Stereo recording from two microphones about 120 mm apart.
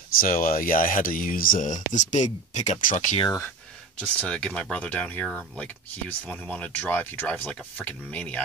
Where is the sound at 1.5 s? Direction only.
90° left.